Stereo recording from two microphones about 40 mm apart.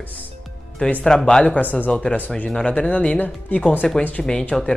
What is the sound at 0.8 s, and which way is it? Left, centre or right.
Speech, left.